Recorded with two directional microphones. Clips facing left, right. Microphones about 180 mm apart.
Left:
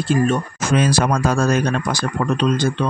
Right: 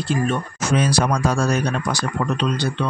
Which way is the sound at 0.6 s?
90° left.